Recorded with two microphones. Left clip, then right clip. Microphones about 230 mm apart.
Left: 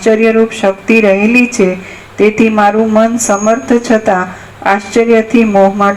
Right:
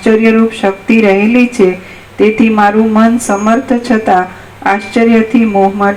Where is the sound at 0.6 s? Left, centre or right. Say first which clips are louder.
Left 1 dB; left.